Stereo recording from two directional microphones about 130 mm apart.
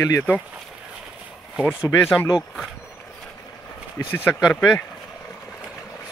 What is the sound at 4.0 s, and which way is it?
Speech, 15° left (ahead or behind).